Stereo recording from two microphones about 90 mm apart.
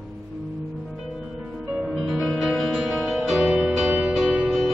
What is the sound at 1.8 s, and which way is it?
Music, 5° right (ahead or behind).